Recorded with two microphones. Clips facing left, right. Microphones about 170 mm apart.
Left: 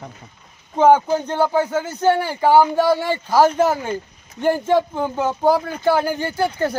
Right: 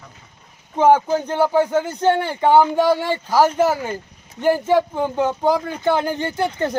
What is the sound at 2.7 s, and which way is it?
Speech, 15° right (ahead or behind).